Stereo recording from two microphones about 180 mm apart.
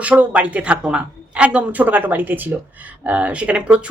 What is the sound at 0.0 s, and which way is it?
A woman's voice, 10° right (ahead or behind).